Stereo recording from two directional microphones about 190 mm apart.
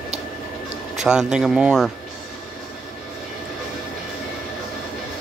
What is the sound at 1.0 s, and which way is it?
Speech, 5° right (ahead or behind).